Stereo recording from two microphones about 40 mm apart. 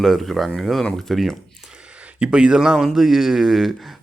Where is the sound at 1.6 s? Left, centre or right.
Right.